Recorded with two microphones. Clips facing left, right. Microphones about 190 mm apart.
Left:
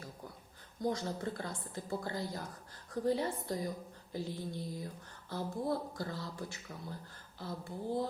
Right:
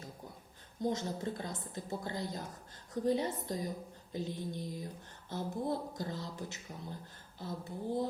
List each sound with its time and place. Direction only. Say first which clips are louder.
0.8 s speech: even; 20° right (ahead or behind)